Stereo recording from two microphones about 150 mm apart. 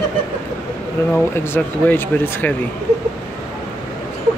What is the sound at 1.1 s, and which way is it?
Speech, 10° left (ahead or behind).